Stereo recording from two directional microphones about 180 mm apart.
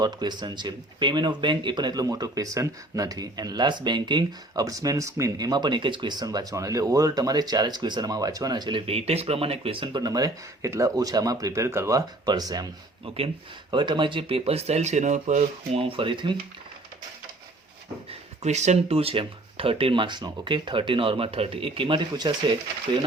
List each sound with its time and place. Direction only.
0.0 s speech: 25° right (ahead or behind)
18.1 s speech: 40° right (ahead or behind)